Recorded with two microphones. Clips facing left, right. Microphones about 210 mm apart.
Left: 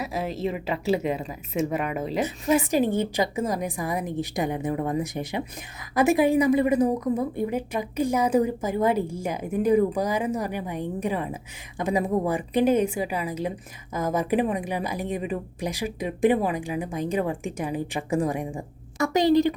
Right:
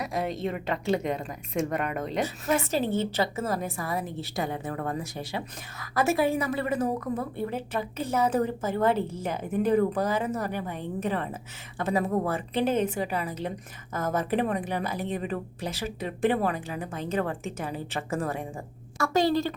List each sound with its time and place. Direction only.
0.0 s a woman's voice: 5° left (ahead or behind)
2.5 s a woman's voice: 15° left (ahead or behind)